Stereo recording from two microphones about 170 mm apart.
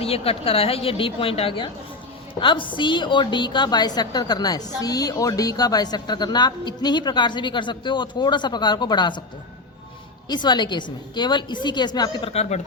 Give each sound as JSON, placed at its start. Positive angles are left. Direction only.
{"t": 0.0, "sound": "a woman's voice", "side_deg": 35}
{"t": 10.2, "sound": "a woman's voice", "side_deg": 25}